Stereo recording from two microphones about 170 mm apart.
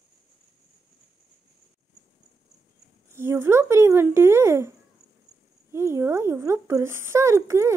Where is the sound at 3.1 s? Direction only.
15° right (ahead or behind).